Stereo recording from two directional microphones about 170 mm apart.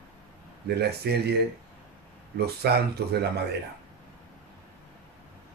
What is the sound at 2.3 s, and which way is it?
Speech, 70° right (ahead or behind).